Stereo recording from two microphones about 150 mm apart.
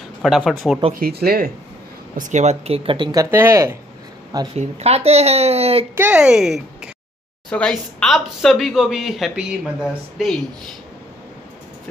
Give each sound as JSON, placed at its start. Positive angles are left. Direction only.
{"t": 0.2, "sound": "speech", "side_deg": 0}
{"t": 0.9, "sound": "speech", "side_deg": -90}
{"t": 2.1, "sound": "speech", "side_deg": -55}
{"t": 4.6, "sound": "speech", "side_deg": -45}
{"t": 5.9, "sound": "speech", "side_deg": -10}